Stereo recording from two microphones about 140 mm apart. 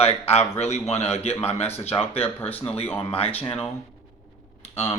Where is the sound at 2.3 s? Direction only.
15° left (ahead or behind).